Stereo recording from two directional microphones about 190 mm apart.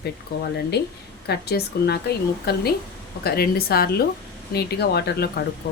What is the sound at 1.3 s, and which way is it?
Speech, 60° left (ahead or behind).